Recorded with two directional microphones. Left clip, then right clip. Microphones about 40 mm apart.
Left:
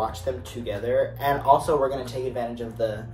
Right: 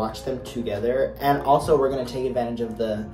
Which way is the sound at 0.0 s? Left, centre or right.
Right.